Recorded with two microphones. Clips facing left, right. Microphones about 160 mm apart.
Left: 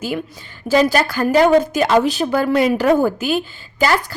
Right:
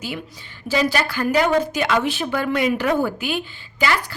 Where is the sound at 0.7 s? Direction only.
45° left (ahead or behind).